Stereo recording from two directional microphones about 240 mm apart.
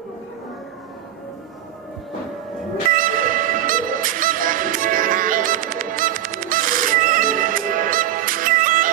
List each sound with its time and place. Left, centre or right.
2.9 s music: right